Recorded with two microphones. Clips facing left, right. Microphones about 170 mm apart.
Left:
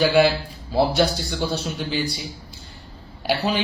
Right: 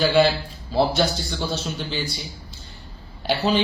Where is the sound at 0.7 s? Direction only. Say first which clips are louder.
Left 1 dB; 5° left (ahead or behind).